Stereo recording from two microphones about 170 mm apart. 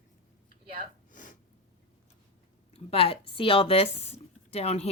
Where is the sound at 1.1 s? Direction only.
50° left (ahead or behind).